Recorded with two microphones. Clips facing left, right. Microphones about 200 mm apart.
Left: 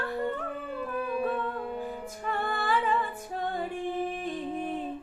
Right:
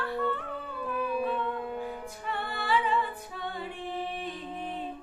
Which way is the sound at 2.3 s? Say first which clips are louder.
Left 1 dB; 45° left (ahead or behind).